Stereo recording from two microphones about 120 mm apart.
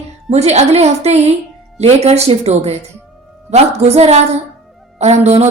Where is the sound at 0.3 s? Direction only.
65° right (ahead or behind).